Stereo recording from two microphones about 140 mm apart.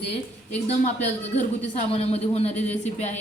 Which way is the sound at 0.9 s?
55° left (ahead or behind).